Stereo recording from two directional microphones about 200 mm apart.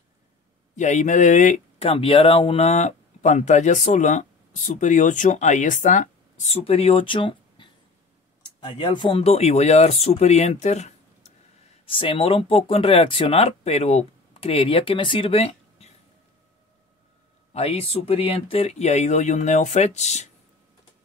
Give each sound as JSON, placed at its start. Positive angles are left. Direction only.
{"t": 0.7, "sound": "speech", "side_deg": 35}
{"t": 1.9, "sound": "speech", "side_deg": 25}
{"t": 17.5, "sound": "speech", "side_deg": 30}